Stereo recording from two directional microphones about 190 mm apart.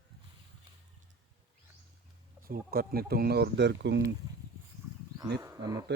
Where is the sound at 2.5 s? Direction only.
50° right (ahead or behind).